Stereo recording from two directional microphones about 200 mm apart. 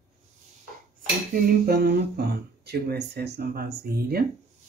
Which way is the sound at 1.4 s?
50° right (ahead or behind).